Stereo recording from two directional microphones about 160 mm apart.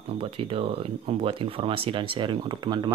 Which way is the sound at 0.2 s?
35° right (ahead or behind).